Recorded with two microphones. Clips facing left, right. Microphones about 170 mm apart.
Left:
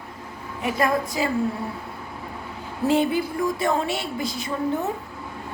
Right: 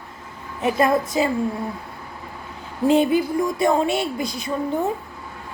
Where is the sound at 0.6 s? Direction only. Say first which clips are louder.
Right 4 dB; 20° right (ahead or behind).